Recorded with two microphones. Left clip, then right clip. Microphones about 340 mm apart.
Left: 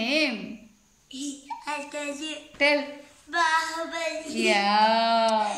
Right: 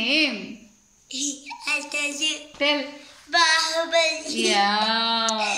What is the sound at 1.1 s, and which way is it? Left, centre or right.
A child's voice, centre.